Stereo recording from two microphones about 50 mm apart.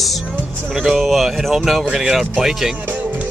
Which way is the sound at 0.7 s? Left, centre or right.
Centre.